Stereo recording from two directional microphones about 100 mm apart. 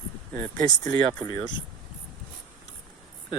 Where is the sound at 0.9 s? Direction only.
40° left (ahead or behind).